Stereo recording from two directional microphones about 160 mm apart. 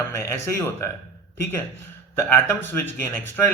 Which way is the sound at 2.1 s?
15° left (ahead or behind).